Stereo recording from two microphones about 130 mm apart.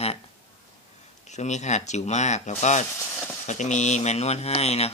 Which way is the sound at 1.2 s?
65° left (ahead or behind).